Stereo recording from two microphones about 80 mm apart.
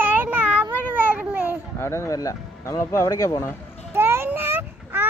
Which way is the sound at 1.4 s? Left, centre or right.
Left.